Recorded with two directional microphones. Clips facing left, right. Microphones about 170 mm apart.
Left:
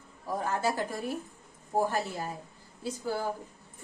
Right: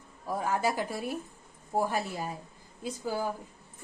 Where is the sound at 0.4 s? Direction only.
10° right (ahead or behind).